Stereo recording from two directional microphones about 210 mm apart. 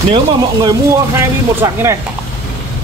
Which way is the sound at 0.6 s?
15° right (ahead or behind).